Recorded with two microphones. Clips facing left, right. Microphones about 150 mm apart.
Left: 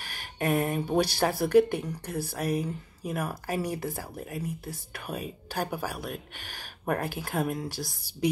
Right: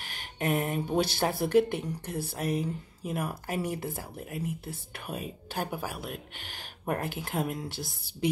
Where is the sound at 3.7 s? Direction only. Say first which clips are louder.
Left 2 dB; 20° right (ahead or behind).